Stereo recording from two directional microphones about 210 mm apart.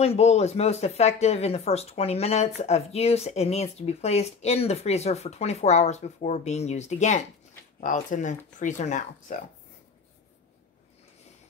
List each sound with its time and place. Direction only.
0.0 s speech: 30° left (ahead or behind)